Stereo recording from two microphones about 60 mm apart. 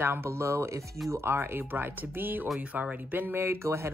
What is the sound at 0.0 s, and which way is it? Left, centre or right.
Speech, right.